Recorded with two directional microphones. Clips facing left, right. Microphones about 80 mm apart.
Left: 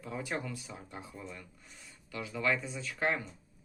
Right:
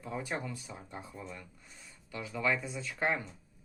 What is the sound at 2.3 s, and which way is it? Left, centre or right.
Speech, centre.